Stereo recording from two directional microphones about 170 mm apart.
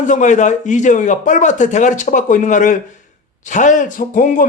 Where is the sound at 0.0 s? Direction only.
50° left (ahead or behind).